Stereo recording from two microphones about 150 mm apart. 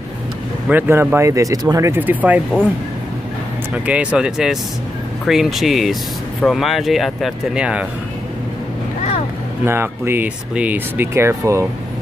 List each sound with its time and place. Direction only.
0.7 s speech: 15° right (ahead or behind)
3.7 s speech: 10° right (ahead or behind)
9.7 s speech: 15° right (ahead or behind)